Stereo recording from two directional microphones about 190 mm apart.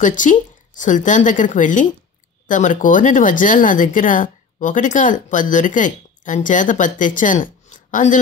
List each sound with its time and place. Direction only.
0.0 s a woman's voice: 45° left (ahead or behind)